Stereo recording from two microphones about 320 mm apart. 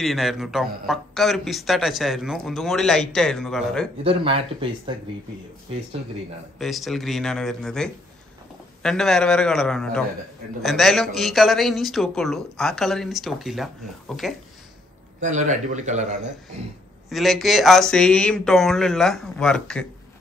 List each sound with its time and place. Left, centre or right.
0.0 s a man's voice: centre
4.0 s speech: centre
6.6 s a man's voice: centre
15.2 s a man's voice: right
17.1 s a man's voice: centre